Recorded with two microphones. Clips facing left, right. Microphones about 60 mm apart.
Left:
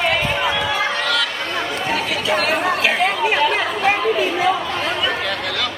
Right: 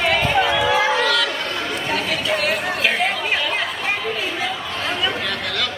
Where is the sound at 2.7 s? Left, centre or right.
Centre.